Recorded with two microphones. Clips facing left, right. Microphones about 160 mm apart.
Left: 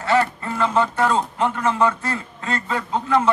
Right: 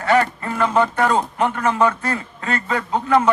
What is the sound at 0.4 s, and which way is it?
A man's voice, 60° right (ahead or behind).